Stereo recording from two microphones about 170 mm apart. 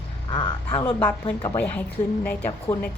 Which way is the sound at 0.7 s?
10° left (ahead or behind).